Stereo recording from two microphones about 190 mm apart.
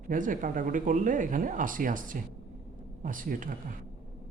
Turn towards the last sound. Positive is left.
turn(degrees=-45)  # may be behind; listen again after turning